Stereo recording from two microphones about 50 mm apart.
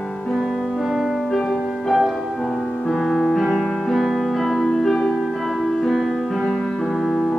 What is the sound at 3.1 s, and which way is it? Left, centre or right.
Music, centre.